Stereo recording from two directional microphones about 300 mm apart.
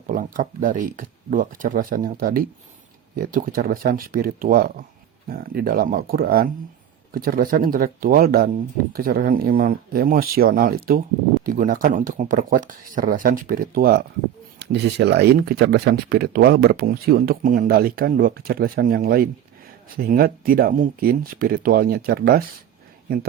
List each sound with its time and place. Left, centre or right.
0.1 s speech: right